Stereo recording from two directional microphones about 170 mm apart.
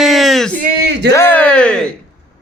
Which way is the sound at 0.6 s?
75° right (ahead or behind).